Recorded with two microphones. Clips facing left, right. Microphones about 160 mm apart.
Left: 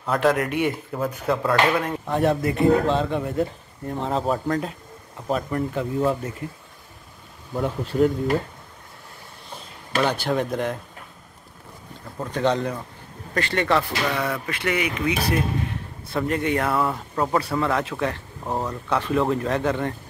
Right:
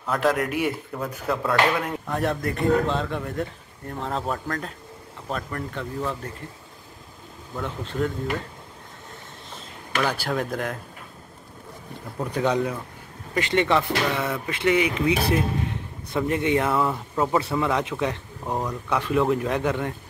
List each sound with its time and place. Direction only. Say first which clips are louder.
0.0 s speech: left 2 dB; centre (ahead or behind)
7.6 s speech: left 6 dB; 10° left (ahead or behind)
10.0 s speech: left 3 dB; 5° right (ahead or behind)
12.2 s speech: left 1 dB; 10° right (ahead or behind)
13.3 s speech: right 1 dB; 20° right (ahead or behind)
16.9 s speech: even; 5° right (ahead or behind)
17.4 s speech: even; 20° right (ahead or behind)
18.5 s speech: left 1 dB; 10° left (ahead or behind)
18.9 s speech: even; 10° right (ahead or behind)